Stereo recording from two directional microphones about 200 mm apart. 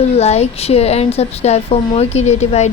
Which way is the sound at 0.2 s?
30° left (ahead or behind).